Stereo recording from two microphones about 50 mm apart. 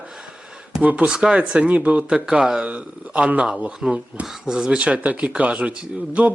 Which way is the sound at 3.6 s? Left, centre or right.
Centre.